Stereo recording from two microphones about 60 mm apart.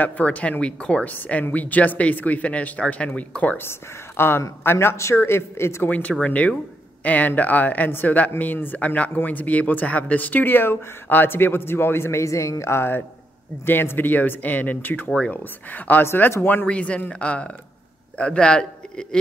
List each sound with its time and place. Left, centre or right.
0.0 s speech: left
1.1 s speech: left
4.2 s a man's voice: left
5.9 s speech: left
15.0 s speech: centre
15.7 s speech: left
16.6 s a man's voice: centre